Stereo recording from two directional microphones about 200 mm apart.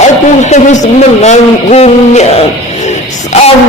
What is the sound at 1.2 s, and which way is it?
A man's voice, 35° left (ahead or behind).